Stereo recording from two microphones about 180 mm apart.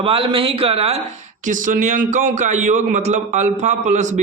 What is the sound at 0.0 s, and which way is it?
Speech, 30° right (ahead or behind).